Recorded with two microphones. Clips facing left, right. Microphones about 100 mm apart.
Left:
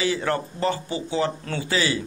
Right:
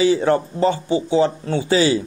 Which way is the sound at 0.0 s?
25° right (ahead or behind).